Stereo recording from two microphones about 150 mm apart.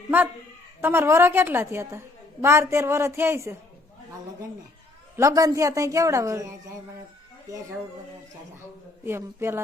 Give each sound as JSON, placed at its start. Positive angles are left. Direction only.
{"t": 0.8, "sound": "a woman's voice", "side_deg": -15}
{"t": 5.1, "sound": "a woman's voice", "side_deg": -20}
{"t": 9.0, "sound": "a woman's voice", "side_deg": -15}